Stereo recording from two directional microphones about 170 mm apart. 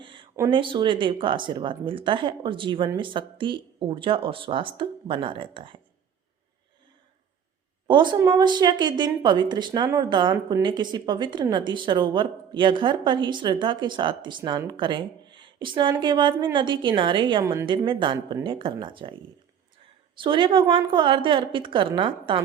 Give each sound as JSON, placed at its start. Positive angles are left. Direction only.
{"t": 0.0, "sound": "a sound", "side_deg": -30}
{"t": 0.5, "sound": "speech", "side_deg": -30}
{"t": 7.9, "sound": "speech", "side_deg": -30}
{"t": 20.1, "sound": "speech", "side_deg": -30}